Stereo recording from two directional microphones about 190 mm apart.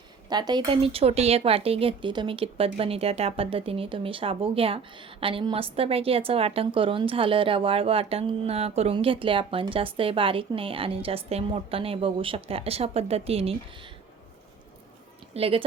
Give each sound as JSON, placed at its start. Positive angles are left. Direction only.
{"t": 0.3, "sound": "a woman's voice", "side_deg": -20}
{"t": 15.3, "sound": "a woman's voice", "side_deg": -30}